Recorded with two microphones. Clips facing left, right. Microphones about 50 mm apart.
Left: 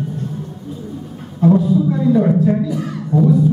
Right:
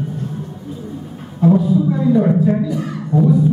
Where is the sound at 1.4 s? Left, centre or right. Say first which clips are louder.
Even; centre.